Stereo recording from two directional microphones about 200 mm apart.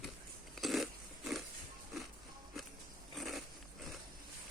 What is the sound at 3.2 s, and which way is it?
Biting, centre (ahead or behind).